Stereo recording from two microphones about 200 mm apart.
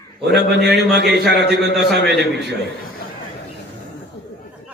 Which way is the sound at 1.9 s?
55° right (ahead or behind).